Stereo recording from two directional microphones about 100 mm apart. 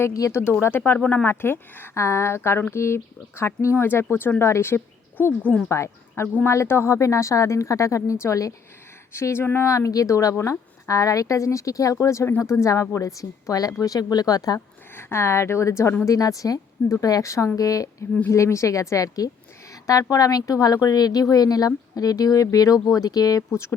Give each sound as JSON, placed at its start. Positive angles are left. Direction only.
{"t": 0.0, "sound": "a woman's voice", "side_deg": 30}
{"t": 0.6, "sound": "a woman's voice", "side_deg": 20}
{"t": 14.9, "sound": "a woman's voice", "side_deg": 25}